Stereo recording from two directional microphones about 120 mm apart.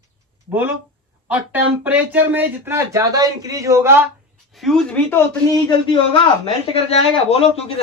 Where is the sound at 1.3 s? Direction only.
15° right (ahead or behind).